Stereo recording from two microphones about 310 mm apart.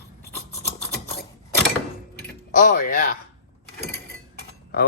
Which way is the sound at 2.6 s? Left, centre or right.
Left.